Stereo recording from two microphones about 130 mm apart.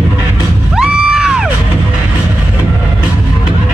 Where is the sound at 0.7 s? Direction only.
5° right (ahead or behind).